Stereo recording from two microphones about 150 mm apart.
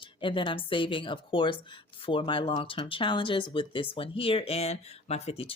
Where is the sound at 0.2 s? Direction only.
35° left (ahead or behind).